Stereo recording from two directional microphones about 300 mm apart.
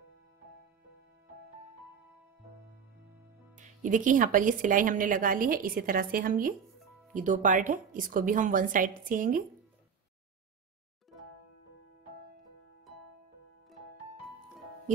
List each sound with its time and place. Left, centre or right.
3.5 s speech: right